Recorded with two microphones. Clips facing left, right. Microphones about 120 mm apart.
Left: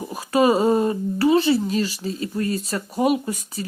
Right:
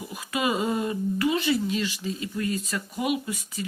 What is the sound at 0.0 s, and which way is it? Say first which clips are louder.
Speech: left 9 dB; 35° left (ahead or behind).